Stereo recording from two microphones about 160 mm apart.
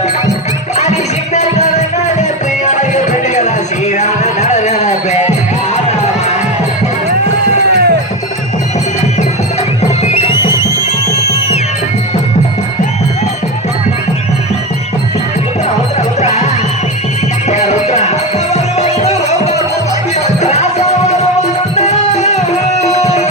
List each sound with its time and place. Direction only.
0.8 s music: 45° left (ahead or behind)
2.6 s music: 50° left (ahead or behind)
7.7 s music: 85° right
10.0 s music: 45° left (ahead or behind)
16.0 s music: 45° left (ahead or behind)
17.5 s music: 45° left (ahead or behind)